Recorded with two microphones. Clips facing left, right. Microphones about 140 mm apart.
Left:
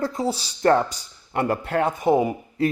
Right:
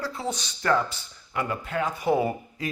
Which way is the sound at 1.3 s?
65° left (ahead or behind).